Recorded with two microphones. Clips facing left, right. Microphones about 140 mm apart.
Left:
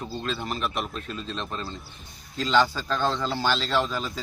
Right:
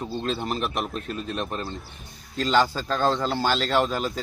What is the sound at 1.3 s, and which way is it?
Speech, 20° right (ahead or behind).